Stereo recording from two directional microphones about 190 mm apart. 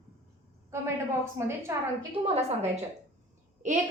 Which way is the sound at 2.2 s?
30° right (ahead or behind).